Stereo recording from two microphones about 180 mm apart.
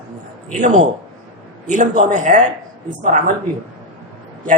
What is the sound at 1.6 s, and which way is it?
Speech, 45° right (ahead or behind).